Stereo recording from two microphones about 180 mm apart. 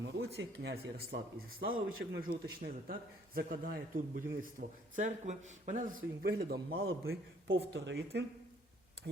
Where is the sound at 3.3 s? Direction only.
50° right (ahead or behind).